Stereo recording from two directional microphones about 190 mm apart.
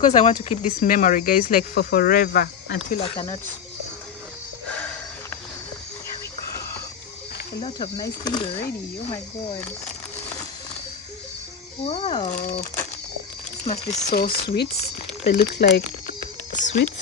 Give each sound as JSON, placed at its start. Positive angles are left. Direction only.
{"t": 0.0, "sound": "speech", "side_deg": 35}
{"t": 4.7, "sound": "sniff", "side_deg": 5}
{"t": 7.6, "sound": "speech", "side_deg": 25}
{"t": 11.8, "sound": "speech", "side_deg": 30}
{"t": 13.7, "sound": "speech", "side_deg": 35}
{"t": 14.1, "sound": "speech", "side_deg": 55}
{"t": 16.5, "sound": "speech", "side_deg": 40}